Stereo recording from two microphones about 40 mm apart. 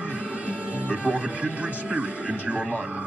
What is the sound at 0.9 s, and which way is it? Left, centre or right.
Speech, right.